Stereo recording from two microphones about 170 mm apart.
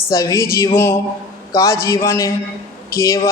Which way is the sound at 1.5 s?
20° left (ahead or behind).